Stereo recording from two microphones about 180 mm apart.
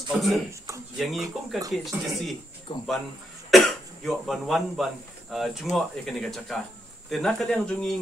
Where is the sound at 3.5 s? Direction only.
Centre (ahead or behind).